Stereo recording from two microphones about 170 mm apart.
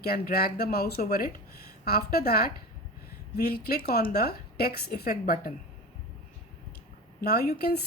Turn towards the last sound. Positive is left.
turn(degrees=65)  # may be behind; listen again after turning